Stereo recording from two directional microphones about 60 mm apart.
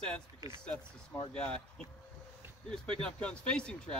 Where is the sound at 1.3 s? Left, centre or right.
Centre.